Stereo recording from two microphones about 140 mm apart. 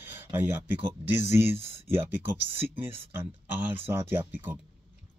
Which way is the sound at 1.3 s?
15° right (ahead or behind).